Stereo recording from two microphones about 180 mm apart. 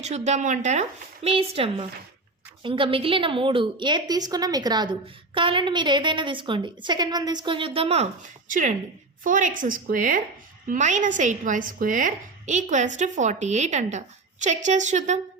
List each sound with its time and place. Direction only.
0.0 s a woman's voice: 40° right (ahead or behind)